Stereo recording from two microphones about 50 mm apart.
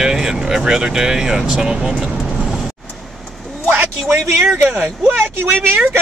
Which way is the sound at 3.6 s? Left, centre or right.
Right.